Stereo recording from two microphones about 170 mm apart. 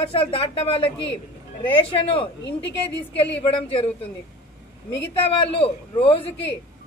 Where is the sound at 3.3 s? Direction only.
35° left (ahead or behind).